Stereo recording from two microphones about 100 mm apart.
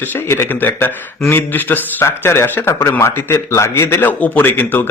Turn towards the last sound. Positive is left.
turn(degrees=15)  # may be behind; listen again after turning